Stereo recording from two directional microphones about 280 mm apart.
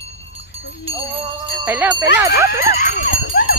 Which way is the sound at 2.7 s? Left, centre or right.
Left.